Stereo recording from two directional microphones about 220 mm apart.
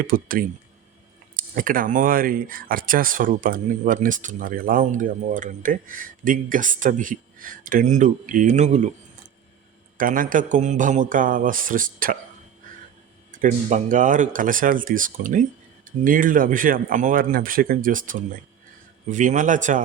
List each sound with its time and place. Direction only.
0.0 s speech: 40° right (ahead or behind)
13.3 s speech: 35° right (ahead or behind)